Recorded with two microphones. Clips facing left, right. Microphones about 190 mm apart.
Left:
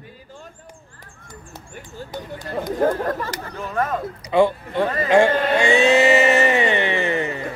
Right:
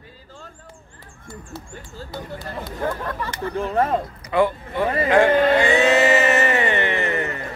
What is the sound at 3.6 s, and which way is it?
Speech, 30° right (ahead or behind).